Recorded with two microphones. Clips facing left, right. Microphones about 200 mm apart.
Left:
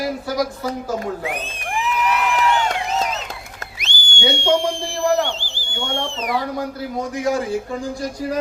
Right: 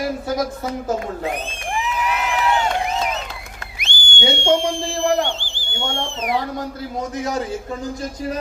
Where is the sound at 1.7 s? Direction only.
15° right (ahead or behind).